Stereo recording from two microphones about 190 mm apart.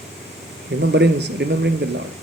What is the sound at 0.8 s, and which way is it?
Speech, 65° right (ahead or behind).